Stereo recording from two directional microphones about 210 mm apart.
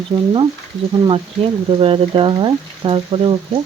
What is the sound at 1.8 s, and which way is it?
Speech, 25° right (ahead or behind).